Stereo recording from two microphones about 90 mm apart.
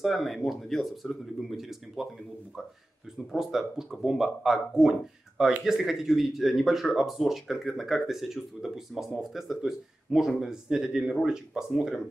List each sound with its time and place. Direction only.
0.0 s speech: centre (ahead or behind)
3.3 s speech: 5° right (ahead or behind)